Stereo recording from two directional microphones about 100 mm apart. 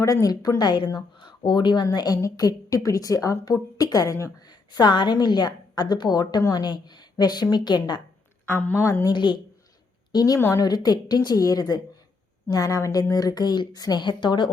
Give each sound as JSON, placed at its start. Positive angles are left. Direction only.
{"t": 0.0, "sound": "a woman's voice", "side_deg": 35}
{"t": 8.4, "sound": "a woman's voice", "side_deg": 20}
{"t": 8.9, "sound": "a woman's voice", "side_deg": 30}
{"t": 9.1, "sound": "a woman's voice", "side_deg": 50}
{"t": 10.1, "sound": "a woman's voice", "side_deg": 40}